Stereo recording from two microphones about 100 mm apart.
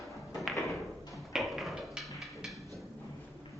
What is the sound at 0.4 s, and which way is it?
Thump, centre (ahead or behind).